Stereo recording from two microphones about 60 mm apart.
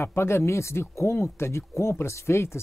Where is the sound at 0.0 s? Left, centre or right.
Left.